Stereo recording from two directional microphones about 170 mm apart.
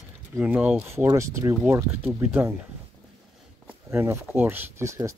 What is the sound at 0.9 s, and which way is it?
Speech, 15° right (ahead or behind).